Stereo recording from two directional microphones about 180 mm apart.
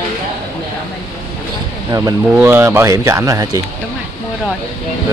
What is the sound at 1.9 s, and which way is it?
Speech, 20° right (ahead or behind).